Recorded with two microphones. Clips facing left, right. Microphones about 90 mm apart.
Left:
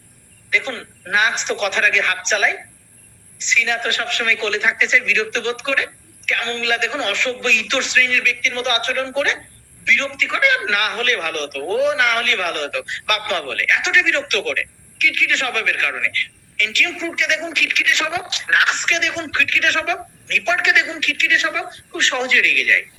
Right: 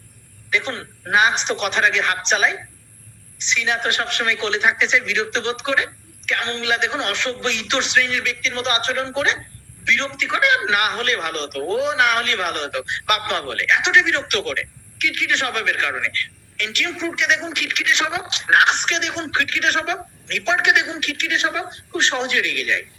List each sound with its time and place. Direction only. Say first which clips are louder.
0.5 s a man's voice: left 1 dB; 20° right (ahead or behind)